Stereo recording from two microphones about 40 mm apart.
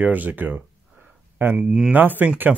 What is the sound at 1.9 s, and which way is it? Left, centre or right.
Speech, right.